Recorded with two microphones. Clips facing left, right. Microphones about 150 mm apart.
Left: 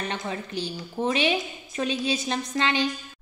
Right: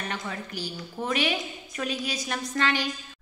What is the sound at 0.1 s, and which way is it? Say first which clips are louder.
A woman's voice: left 3 dB; 25° left (ahead or behind).